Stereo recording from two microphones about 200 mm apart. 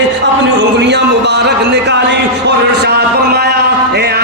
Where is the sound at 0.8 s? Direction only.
60° right (ahead or behind).